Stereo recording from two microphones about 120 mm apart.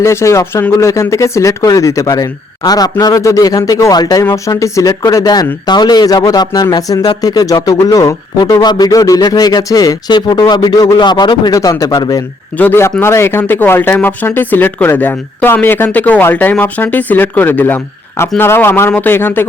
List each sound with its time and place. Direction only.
0.0 s speech: 25° left (ahead or behind)
12.5 s speech: 15° left (ahead or behind)